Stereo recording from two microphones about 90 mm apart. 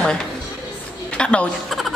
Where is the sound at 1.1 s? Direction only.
10° left (ahead or behind).